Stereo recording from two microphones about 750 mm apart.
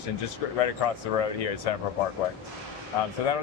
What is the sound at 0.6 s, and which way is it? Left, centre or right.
Speech, left.